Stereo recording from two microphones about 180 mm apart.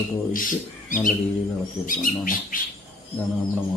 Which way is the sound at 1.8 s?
50° left (ahead or behind).